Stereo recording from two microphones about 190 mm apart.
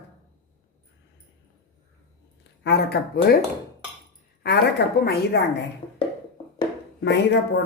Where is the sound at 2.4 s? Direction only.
60° left (ahead or behind).